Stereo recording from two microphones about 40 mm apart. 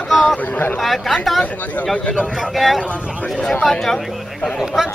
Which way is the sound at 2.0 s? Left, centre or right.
Left.